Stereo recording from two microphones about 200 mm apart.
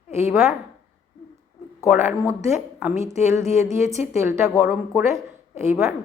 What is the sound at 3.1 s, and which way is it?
A woman's voice, 35° left (ahead or behind).